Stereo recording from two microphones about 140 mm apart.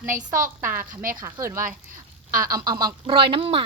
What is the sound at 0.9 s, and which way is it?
Speech, 80° right.